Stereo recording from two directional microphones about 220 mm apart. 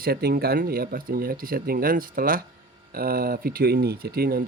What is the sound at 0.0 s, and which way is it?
Speech, 45° right (ahead or behind).